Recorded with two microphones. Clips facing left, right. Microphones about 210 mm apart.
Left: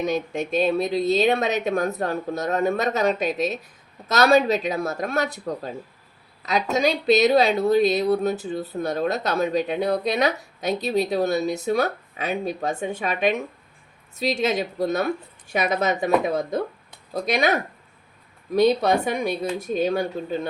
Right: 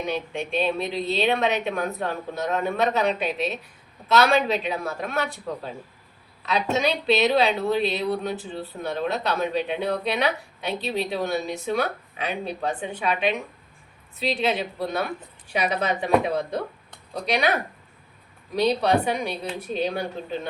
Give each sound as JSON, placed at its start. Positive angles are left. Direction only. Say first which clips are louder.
{"t": 0.1, "sound": "a woman's voice", "louder": "left 3 dB", "side_deg": 40}
{"t": 18.5, "sound": "a woman's voice", "louder": "left 3 dB", "side_deg": 45}